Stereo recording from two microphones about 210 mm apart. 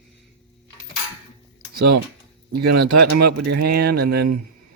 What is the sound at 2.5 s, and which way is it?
Speech, 50° right (ahead or behind).